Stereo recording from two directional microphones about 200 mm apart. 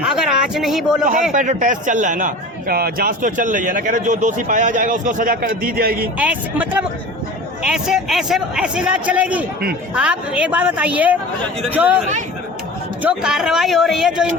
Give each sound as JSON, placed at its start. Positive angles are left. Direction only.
{"t": 0.0, "sound": "speech", "side_deg": -5}
{"t": 1.3, "sound": "a man's voice", "side_deg": -40}
{"t": 6.1, "sound": "a woman's voice", "side_deg": -5}